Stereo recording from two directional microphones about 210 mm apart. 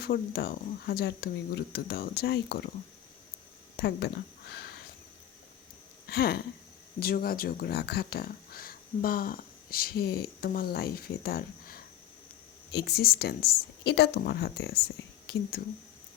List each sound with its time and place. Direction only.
0.0 s speech: 45° left (ahead or behind)
3.8 s speech: 50° left (ahead or behind)
6.1 s speech: 45° left (ahead or behind)